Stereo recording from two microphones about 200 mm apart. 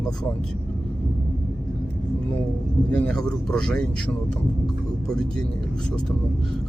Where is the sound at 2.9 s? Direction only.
5° left (ahead or behind).